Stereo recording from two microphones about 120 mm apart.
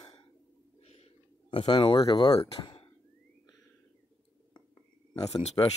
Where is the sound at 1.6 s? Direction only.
40° left (ahead or behind).